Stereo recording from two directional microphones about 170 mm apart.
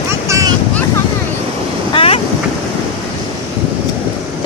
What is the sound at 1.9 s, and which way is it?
Wind noise, 35° left (ahead or behind).